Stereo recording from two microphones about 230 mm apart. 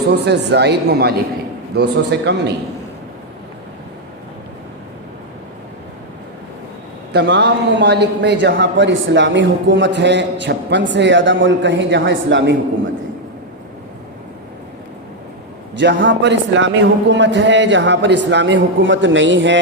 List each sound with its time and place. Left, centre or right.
0.1 s a man's voice: right
7.1 s a man's voice: right
15.8 s a man's voice: right